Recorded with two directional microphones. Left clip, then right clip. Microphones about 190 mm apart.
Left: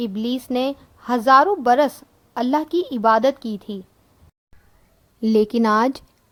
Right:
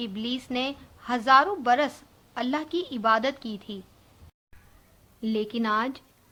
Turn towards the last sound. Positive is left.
turn(degrees=50)  # may be behind; listen again after turning